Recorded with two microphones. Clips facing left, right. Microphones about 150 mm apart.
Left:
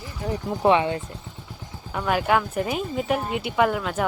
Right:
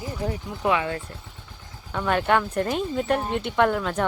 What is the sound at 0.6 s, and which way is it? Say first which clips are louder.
Speech: left 4 dB; 30° left (ahead or behind).